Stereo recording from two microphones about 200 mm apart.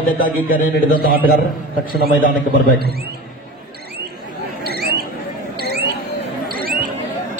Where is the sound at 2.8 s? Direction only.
50° right (ahead or behind).